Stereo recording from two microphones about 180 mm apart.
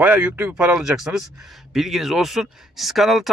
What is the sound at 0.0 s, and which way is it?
A man's voice, 10° right (ahead or behind).